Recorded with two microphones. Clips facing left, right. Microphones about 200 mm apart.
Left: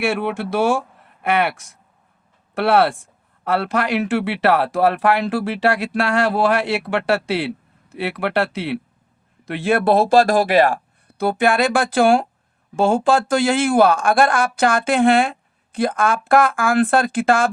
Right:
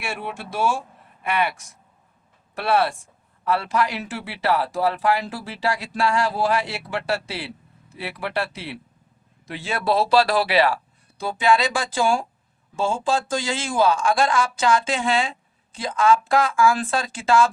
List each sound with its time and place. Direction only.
0.0 s speech: 65° left (ahead or behind)
2.6 s speech: 65° left (ahead or behind); by 10.8 s 50° left (ahead or behind)
11.2 s speech: 60° left (ahead or behind)